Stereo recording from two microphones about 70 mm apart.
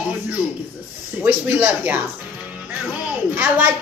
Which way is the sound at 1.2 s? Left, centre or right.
Right.